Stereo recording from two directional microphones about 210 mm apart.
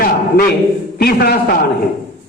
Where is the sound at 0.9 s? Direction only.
50° left (ahead or behind).